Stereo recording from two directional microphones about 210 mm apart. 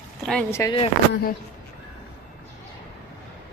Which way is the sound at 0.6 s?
25° left (ahead or behind).